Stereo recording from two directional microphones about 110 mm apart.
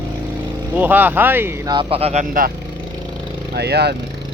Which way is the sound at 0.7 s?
15° right (ahead or behind).